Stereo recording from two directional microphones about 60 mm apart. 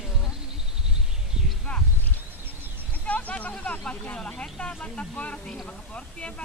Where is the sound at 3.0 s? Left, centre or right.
Left.